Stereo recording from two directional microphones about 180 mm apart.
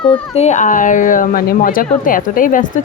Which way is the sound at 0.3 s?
40° left (ahead or behind).